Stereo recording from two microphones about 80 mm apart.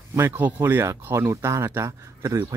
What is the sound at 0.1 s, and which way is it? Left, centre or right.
Speech, right.